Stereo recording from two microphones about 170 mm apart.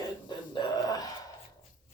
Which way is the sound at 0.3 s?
25° left (ahead or behind).